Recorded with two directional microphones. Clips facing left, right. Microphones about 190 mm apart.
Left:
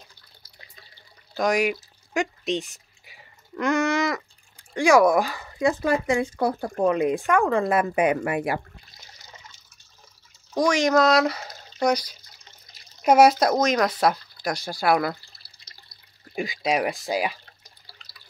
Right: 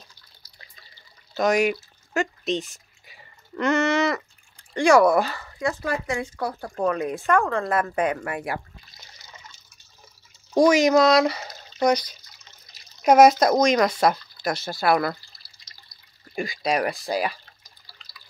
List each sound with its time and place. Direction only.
1.3 s speech: 10° left (ahead or behind)
3.1 s a sound: 10° left (ahead or behind)
4.7 s speech: 10° left (ahead or behind)
10.5 s speech: 5° right (ahead or behind)
12.3 s water: 55° left (ahead or behind)
13.1 s speech: 5° left (ahead or behind)
16.3 s speech: 15° left (ahead or behind)